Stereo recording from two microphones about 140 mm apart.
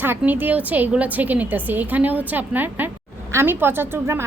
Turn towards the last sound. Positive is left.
turn(degrees=-15)  # may be behind; listen again after turning